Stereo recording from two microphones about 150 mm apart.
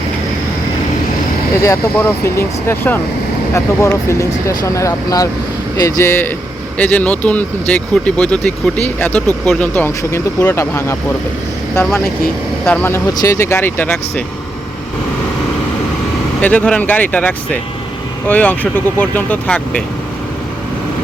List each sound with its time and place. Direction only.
2.0 s speech: 15° left (ahead or behind)
16.4 s speech: 10° left (ahead or behind)